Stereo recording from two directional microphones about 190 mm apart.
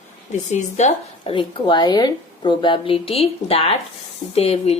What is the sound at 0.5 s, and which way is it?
A woman's voice, 35° left (ahead or behind).